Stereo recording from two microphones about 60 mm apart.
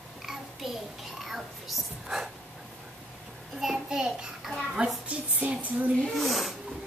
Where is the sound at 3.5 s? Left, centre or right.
Centre.